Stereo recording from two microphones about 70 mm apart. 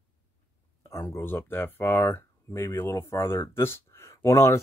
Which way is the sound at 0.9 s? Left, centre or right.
Left.